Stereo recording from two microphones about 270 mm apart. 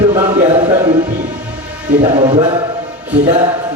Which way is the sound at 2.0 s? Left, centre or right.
Right.